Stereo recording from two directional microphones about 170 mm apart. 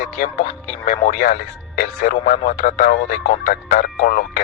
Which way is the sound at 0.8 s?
45° left (ahead or behind).